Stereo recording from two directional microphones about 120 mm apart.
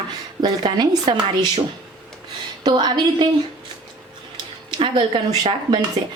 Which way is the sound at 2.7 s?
40° right (ahead or behind).